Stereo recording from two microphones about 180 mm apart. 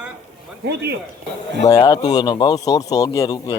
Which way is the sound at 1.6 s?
20° left (ahead or behind).